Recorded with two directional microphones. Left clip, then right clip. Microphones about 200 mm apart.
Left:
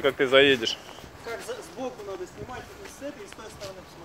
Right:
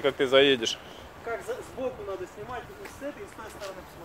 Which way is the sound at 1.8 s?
50° left (ahead or behind).